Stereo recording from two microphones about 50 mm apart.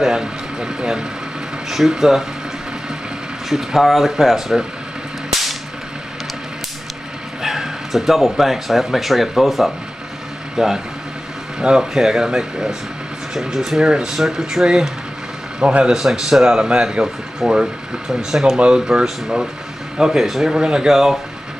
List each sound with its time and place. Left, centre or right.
0.0 s speech: centre
3.4 s speech: centre
7.4 s speech: centre
15.6 s a man's voice: right
15.9 s speech: centre